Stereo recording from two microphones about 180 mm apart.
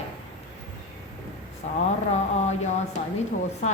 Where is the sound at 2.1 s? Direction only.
40° left (ahead or behind).